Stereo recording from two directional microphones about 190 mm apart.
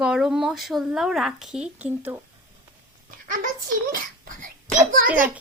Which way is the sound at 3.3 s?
45° right (ahead or behind).